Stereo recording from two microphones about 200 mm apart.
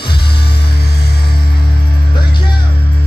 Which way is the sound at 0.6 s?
50° left (ahead or behind).